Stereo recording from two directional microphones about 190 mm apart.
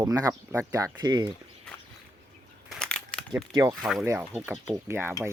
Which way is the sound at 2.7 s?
5° left (ahead or behind).